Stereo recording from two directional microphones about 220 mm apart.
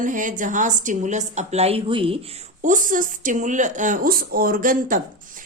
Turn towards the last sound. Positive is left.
turn(degrees=-35)  # may be behind; listen again after turning